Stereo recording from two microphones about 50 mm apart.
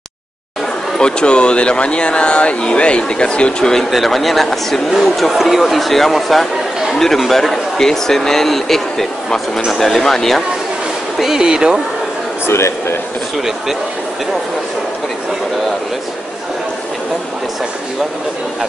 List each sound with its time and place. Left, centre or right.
0.9 s speech: centre
3.9 s speech: centre
11.1 s speech: centre
12.4 s a man's voice: left